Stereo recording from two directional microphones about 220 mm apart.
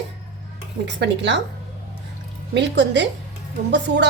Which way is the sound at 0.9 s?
50° right (ahead or behind).